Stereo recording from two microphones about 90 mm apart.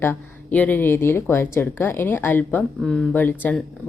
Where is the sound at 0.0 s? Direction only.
20° left (ahead or behind).